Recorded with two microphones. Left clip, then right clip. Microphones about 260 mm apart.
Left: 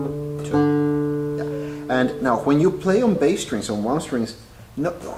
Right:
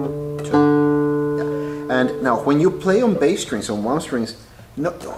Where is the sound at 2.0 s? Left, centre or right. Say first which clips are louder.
Right 2 dB; centre.